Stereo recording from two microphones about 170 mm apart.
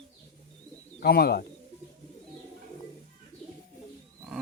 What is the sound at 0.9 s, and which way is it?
Speech, 65° left (ahead or behind).